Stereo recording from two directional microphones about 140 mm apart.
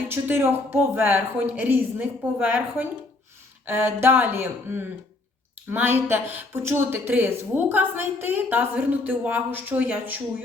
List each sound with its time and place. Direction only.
0.1 s a woman's voice: 15° right (ahead or behind)